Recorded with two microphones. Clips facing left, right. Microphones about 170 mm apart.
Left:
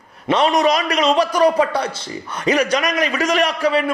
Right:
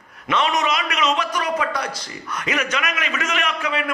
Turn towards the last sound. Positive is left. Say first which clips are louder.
# left 8 dB
turn(degrees=35)  # may be behind; listen again after turning